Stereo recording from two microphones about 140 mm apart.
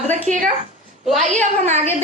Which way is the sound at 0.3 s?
60° right (ahead or behind).